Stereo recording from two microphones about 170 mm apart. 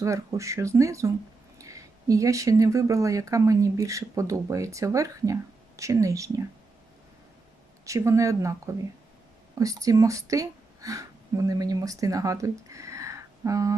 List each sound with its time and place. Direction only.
0.0 s speech: 20° right (ahead or behind)
7.9 s a woman's voice: 20° right (ahead or behind)